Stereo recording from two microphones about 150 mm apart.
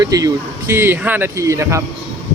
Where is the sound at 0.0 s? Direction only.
25° right (ahead or behind).